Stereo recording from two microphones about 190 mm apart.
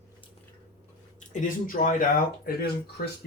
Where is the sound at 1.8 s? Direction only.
45° left (ahead or behind).